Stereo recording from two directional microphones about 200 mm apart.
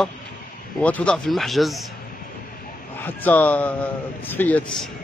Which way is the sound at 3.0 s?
10° left (ahead or behind).